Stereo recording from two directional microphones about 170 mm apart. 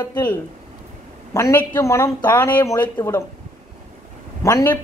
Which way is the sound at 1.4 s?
20° left (ahead or behind).